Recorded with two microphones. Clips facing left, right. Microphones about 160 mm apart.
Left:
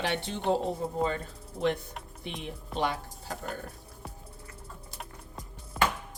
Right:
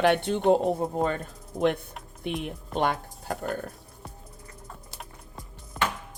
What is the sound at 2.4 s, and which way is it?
Speech, 55° right (ahead or behind).